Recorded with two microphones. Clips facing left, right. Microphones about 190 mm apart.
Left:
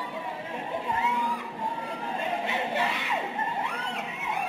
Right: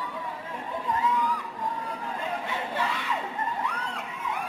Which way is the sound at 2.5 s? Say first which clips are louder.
Left 2 dB; 25° left (ahead or behind).